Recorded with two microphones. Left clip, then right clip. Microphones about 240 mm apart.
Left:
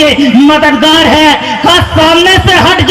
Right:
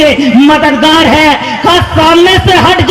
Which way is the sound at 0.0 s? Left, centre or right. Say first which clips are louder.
Even; left.